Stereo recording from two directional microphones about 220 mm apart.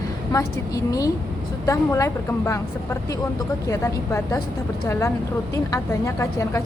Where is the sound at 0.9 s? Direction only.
15° left (ahead or behind).